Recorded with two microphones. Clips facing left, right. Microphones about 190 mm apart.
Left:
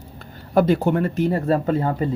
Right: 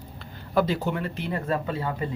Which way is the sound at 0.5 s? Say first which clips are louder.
Left 7 dB; 50° left (ahead or behind).